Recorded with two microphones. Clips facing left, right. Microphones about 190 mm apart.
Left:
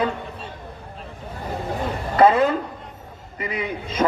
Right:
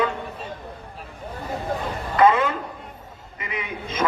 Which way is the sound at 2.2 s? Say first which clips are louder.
Left 2 dB; 35° left (ahead or behind).